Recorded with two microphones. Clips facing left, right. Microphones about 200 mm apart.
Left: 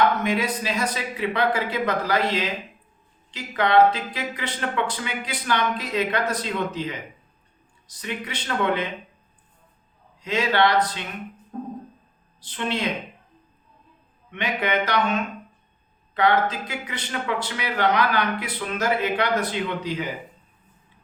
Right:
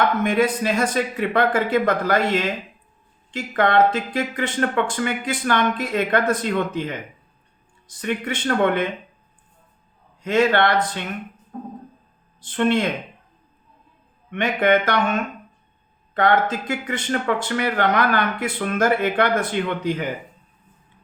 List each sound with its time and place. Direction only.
0.0 s speech: 50° right (ahead or behind)
10.2 s speech: 50° right (ahead or behind)
12.4 s speech: 50° right (ahead or behind)
14.3 s speech: 50° right (ahead or behind)